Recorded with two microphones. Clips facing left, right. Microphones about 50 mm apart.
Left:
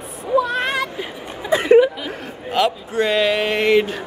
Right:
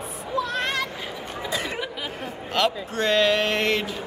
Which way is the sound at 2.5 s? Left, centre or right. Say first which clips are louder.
Left 5 dB; centre.